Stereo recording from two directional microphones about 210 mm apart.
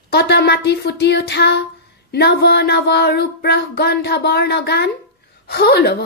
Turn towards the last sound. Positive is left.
turn(degrees=50)  # may be behind; listen again after turning